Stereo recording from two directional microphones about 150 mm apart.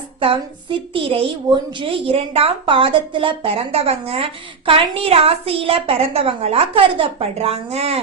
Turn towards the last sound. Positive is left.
turn(degrees=-45)  # may be behind; listen again after turning